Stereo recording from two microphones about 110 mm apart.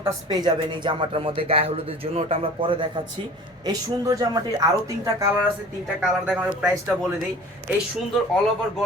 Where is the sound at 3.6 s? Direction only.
35° right (ahead or behind).